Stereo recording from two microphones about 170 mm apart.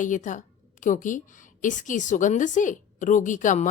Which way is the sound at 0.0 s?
50° left (ahead or behind).